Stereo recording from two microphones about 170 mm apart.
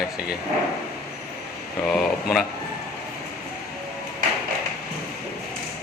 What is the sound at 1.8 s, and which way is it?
Speech, centre (ahead or behind).